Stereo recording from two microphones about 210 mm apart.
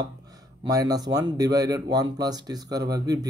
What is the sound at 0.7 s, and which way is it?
Speech, 15° right (ahead or behind).